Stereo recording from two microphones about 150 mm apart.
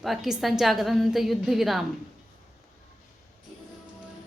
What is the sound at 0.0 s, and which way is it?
A woman's voice, centre (ahead or behind).